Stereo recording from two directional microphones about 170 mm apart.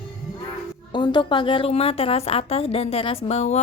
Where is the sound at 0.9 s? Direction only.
25° left (ahead or behind).